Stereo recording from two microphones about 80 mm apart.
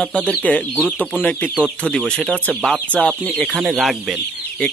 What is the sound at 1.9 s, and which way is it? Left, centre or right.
Speech, centre.